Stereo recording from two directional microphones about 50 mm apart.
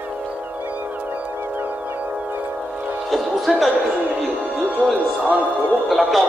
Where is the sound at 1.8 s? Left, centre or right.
Right.